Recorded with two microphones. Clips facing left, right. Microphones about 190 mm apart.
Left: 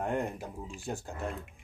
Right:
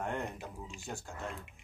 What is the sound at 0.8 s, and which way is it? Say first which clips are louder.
Speech: left 6 dB; 35° left (ahead or behind).